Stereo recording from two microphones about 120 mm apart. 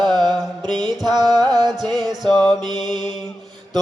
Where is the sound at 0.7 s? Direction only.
40° right (ahead or behind).